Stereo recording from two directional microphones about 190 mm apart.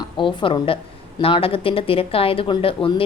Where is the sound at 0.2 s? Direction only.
25° left (ahead or behind).